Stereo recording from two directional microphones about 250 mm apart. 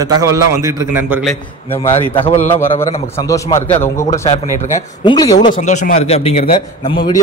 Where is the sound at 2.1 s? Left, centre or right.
Left.